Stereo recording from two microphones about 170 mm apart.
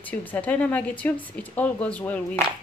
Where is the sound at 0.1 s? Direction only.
10° left (ahead or behind).